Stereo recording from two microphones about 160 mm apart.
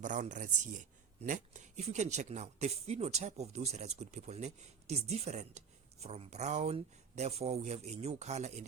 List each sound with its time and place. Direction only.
0.0 s speech: 50° right (ahead or behind)